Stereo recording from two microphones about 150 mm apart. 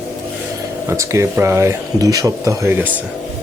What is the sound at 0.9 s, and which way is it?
Speech, 20° right (ahead or behind).